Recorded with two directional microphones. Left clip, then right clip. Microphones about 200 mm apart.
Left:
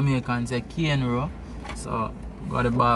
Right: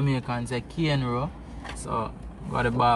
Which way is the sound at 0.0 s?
10° left (ahead or behind).